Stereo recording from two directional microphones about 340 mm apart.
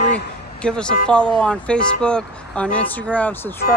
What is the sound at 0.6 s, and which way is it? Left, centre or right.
Speech, centre.